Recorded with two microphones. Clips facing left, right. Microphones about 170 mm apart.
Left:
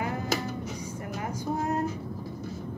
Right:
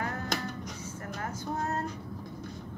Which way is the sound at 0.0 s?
10° left (ahead or behind).